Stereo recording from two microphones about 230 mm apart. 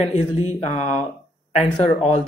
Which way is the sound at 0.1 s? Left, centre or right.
Left.